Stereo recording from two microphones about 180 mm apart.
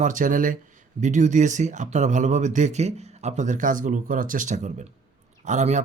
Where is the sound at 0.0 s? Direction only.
45° right (ahead or behind).